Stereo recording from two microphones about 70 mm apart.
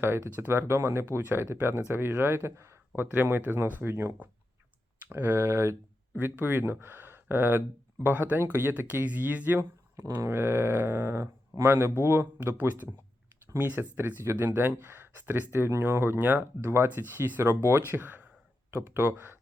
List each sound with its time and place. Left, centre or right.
0.0 s speech: right
18.7 s speech: right